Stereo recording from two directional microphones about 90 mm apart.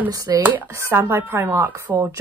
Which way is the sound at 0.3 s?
35° right (ahead or behind).